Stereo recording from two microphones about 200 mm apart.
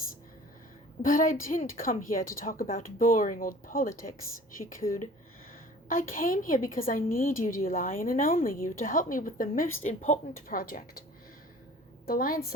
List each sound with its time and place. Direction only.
1.0 s a woman's voice: 40° left (ahead or behind)
12.0 s a woman's voice: 45° left (ahead or behind)